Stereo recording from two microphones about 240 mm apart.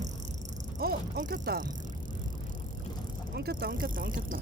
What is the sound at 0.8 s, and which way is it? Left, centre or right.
Speech, right.